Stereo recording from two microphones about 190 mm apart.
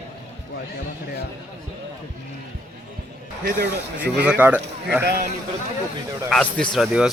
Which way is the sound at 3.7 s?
60° right (ahead or behind).